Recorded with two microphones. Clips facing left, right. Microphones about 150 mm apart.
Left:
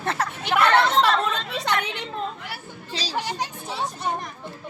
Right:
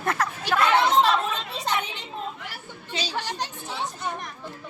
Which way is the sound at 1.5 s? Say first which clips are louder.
Left 2 dB; 70° left (ahead or behind).